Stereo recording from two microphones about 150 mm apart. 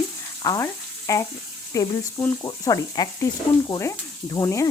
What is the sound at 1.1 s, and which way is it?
Stir, 20° left (ahead or behind).